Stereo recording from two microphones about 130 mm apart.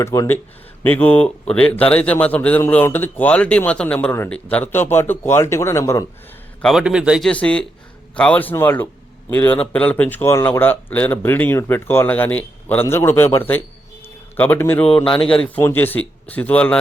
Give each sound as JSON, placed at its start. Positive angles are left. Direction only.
{"t": 0.0, "sound": "a man's voice", "side_deg": 20}
{"t": 6.6, "sound": "a man's voice", "side_deg": 5}
{"t": 7.3, "sound": "speech", "side_deg": 10}
{"t": 14.8, "sound": "speech", "side_deg": 40}
{"t": 15.2, "sound": "speech", "side_deg": 5}